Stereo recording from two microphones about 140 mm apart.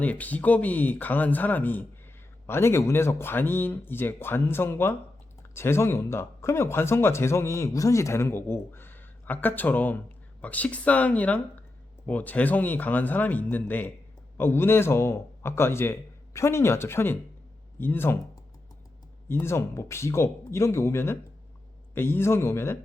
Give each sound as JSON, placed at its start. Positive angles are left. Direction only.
{"t": 0.0, "sound": "speech", "side_deg": 10}
{"t": 19.3, "sound": "speech", "side_deg": 15}